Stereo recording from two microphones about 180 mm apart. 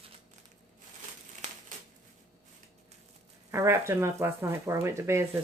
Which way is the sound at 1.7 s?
45° right (ahead or behind).